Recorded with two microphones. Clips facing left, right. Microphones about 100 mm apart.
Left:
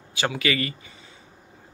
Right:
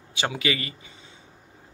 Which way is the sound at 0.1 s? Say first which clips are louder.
Left 2 dB; 20° right (ahead or behind).